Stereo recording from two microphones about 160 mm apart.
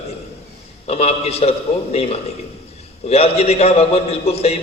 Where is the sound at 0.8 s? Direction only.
40° left (ahead or behind).